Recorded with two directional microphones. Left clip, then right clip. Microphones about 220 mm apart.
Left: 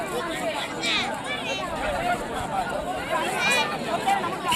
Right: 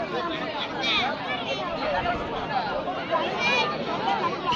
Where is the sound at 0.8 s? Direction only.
25° right (ahead or behind).